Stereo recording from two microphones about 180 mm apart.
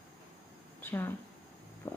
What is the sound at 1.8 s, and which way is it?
Stomach rumble, 10° left (ahead or behind).